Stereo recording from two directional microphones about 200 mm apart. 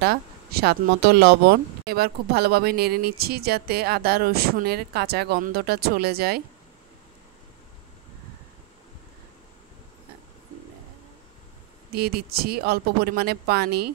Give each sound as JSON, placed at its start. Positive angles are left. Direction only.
{"t": 0.0, "sound": "speech", "side_deg": -50}
{"t": 11.9, "sound": "speech", "side_deg": -50}